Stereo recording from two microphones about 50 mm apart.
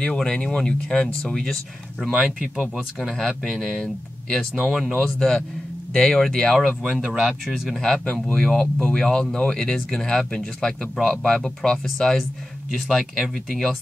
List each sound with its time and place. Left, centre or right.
0.0 s speech: centre
2.0 s speech: centre
2.4 s speech: centre
3.0 s speech: centre
5.0 s speech: centre
7.2 s speech: centre
7.7 s speech: centre